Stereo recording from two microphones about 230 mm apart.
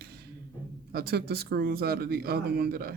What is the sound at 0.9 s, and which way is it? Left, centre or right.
Speech, right.